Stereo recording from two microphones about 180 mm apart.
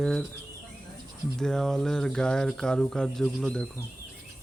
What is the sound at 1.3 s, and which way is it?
Speech, 5° left (ahead or behind).